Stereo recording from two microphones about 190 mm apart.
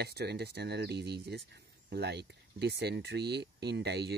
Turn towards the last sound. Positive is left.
turn(degrees=-60)  # may be behind; listen again after turning